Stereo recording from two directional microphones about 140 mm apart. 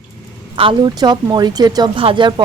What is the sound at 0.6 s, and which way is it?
Speech, 35° right (ahead or behind).